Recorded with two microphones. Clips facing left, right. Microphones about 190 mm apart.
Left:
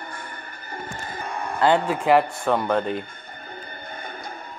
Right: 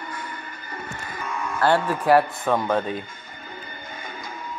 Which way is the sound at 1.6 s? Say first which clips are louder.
Left 1 dB; 20° left (ahead or behind).